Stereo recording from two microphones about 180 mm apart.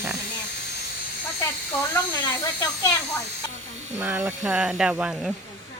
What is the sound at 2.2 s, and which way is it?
Speech, 20° left (ahead or behind).